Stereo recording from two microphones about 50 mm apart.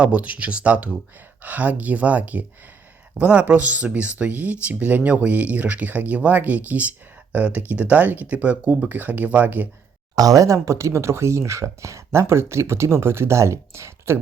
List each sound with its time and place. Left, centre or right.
0.0 s speech: right
10.4 s speech: right